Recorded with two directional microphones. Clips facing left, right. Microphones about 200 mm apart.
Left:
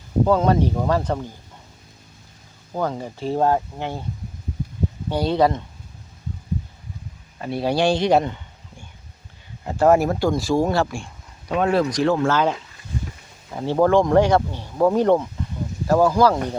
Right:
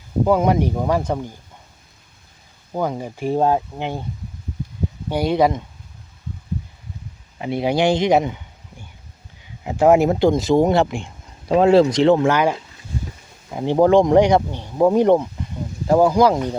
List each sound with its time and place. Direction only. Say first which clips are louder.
0.3 s speech: right 2 dB; 15° right (ahead or behind)
2.7 s speech: right 2 dB; 15° right (ahead or behind)
5.0 s speech: right 2 dB; 15° right (ahead or behind)
7.3 s speech: right 2 dB; 15° right (ahead or behind)
9.6 s speech: right 2 dB; 15° right (ahead or behind)